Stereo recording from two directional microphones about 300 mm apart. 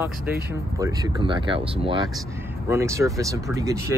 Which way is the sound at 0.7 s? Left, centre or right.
Centre.